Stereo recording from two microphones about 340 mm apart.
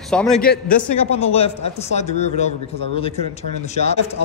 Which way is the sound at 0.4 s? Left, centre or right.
Left.